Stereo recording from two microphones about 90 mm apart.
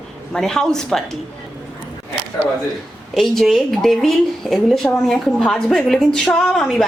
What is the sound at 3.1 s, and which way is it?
Speech, centre (ahead or behind).